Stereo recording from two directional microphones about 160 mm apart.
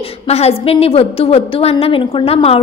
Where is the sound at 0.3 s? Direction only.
40° left (ahead or behind).